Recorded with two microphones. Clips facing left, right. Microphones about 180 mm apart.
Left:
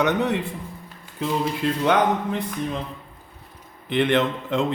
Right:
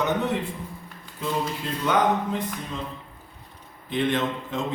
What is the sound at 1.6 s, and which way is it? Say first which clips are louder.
Speech: left 8 dB; 90° left.